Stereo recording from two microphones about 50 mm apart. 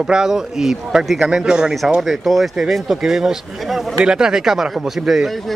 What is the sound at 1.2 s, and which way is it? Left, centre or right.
Speech, centre.